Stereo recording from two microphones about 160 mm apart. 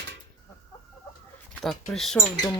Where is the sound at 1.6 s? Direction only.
Centre (ahead or behind).